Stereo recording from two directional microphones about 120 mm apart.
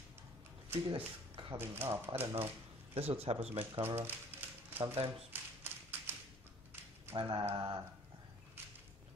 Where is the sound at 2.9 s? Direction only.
55° right (ahead or behind).